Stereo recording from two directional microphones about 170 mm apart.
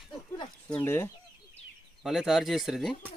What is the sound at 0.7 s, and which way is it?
Speech, 15° left (ahead or behind).